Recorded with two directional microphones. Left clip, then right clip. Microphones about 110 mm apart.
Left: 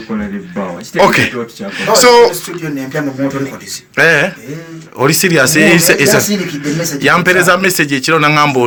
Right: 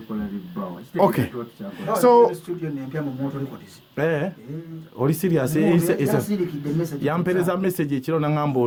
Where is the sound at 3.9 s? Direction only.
35° right (ahead or behind).